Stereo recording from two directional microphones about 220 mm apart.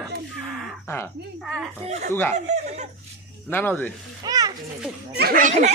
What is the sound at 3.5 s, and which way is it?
Speech, 10° left (ahead or behind).